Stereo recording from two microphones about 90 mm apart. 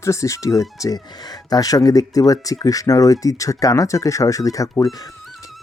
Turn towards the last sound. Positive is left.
turn(degrees=40)  # may be behind; listen again after turning